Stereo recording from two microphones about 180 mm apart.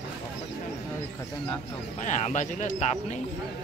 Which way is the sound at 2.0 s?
40° left (ahead or behind).